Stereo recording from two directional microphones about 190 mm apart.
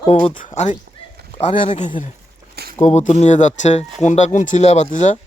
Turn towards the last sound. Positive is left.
turn(degrees=40)  # may be behind; listen again after turning